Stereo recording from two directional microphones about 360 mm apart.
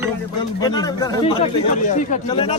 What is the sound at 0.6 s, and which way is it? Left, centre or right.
Speech, centre.